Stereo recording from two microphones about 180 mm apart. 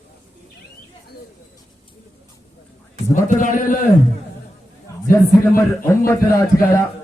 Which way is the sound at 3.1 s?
45° left (ahead or behind).